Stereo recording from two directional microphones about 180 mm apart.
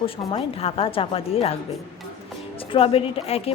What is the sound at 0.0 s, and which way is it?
A woman's voice, 30° left (ahead or behind).